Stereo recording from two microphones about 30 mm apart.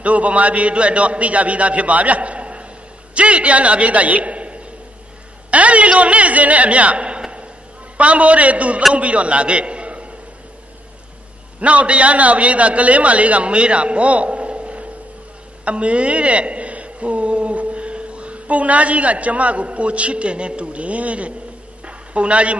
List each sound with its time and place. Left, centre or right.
0.0 s a man's voice: right
11.6 s a man's voice: right
21.8 s a sound: right